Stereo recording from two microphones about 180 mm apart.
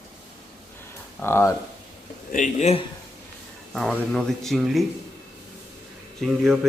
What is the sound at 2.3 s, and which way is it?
Speech, 40° left (ahead or behind).